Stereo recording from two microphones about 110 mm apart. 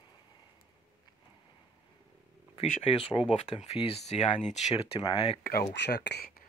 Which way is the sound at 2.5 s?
60° left (ahead or behind).